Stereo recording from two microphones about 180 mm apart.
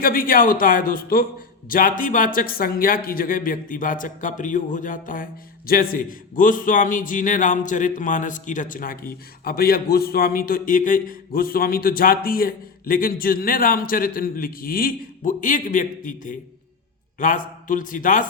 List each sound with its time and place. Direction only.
0.0 s speech: 55° left (ahead or behind)